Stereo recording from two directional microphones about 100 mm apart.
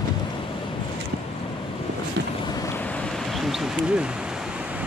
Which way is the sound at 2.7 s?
15° left (ahead or behind).